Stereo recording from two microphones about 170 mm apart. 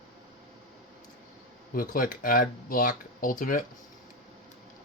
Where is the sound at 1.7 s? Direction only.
55° left (ahead or behind).